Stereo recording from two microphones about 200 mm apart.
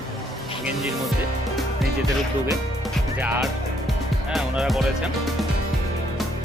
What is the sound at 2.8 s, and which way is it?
Speech, 5° right (ahead or behind).